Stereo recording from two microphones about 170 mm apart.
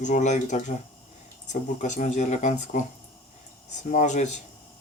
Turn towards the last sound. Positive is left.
turn(degrees=45)  # may be behind; listen again after turning